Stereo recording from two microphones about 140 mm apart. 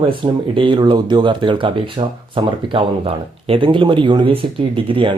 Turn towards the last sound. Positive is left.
turn(degrees=-40)  # may be behind; listen again after turning